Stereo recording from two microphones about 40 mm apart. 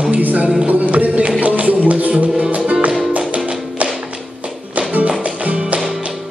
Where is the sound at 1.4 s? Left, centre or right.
Right.